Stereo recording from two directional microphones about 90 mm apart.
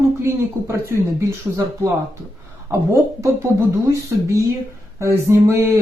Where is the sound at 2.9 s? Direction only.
30° right (ahead or behind).